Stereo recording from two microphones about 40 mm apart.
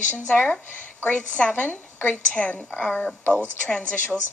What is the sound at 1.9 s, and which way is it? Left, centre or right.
Speech, left.